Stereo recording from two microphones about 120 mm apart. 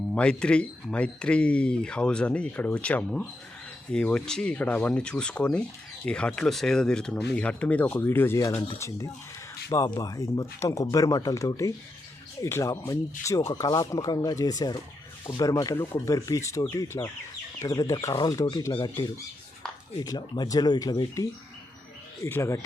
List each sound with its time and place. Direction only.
0.1 s speech: 10° left (ahead or behind); by 8.6 s 25° left (ahead or behind)
9.6 s speech: 25° left (ahead or behind)